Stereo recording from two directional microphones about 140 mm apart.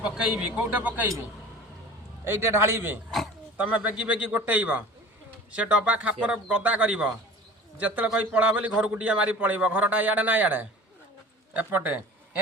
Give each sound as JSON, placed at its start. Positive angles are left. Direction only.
{"t": 0.0, "sound": "a man's voice", "side_deg": -5}
{"t": 2.3, "sound": "a man's voice", "side_deg": -15}